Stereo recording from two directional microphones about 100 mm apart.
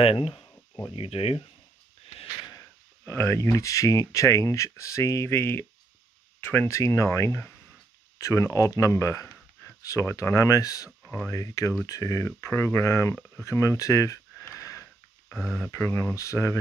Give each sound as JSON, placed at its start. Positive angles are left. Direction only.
{"t": 0.0, "sound": "speech", "side_deg": 70}
{"t": 3.1, "sound": "speech", "side_deg": 25}
{"t": 14.6, "sound": "sniff", "side_deg": 30}
{"t": 15.3, "sound": "speech", "side_deg": 10}
{"t": 15.6, "sound": "speech", "side_deg": 25}